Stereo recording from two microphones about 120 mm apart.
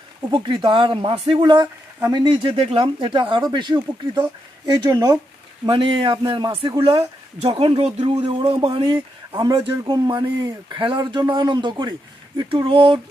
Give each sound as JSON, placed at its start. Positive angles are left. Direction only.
{"t": 0.3, "sound": "speech", "side_deg": -45}
{"t": 5.7, "sound": "speech", "side_deg": -45}